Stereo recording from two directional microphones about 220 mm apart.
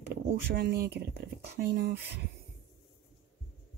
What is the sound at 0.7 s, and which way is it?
Speech, 45° right (ahead or behind).